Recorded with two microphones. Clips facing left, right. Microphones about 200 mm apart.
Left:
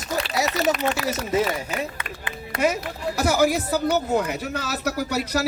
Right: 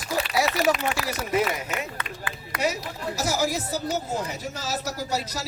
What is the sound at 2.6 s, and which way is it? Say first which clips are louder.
A woman's voice: left 4 dB; 55° left (ahead or behind).